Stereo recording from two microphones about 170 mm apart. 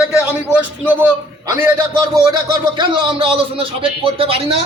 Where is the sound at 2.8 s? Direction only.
30° right (ahead or behind).